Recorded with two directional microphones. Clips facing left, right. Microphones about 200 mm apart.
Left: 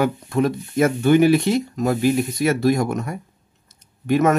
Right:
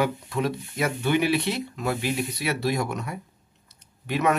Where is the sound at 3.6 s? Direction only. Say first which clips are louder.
Left 11 dB; 45° left (ahead or behind).